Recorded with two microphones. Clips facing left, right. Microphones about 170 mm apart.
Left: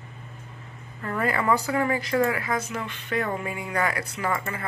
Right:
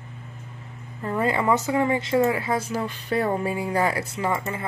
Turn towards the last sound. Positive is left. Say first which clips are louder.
# right 2 dB
turn(degrees=-25)  # may be behind; listen again after turning